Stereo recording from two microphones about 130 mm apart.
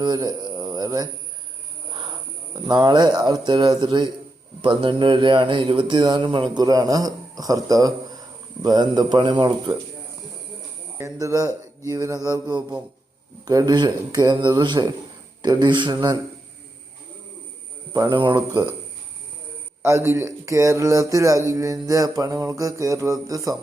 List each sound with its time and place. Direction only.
0.0 s speech: 35° right (ahead or behind)
0.6 s a sound: 30° right (ahead or behind)
2.5 s speech: 35° right (ahead or behind)
10.9 s speech: 25° right (ahead or behind)
17.9 s speech: 35° right (ahead or behind)
19.8 s speech: 20° right (ahead or behind)